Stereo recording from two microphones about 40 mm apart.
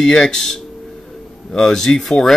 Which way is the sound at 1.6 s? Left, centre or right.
Centre.